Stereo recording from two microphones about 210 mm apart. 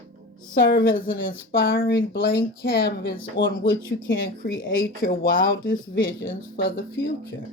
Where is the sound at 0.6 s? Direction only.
45° left (ahead or behind).